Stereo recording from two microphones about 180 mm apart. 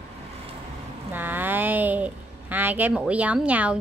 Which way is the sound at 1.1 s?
10° right (ahead or behind).